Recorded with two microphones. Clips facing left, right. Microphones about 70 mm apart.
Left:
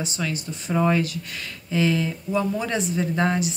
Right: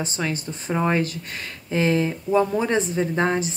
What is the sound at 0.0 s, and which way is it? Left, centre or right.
A woman's voice, right.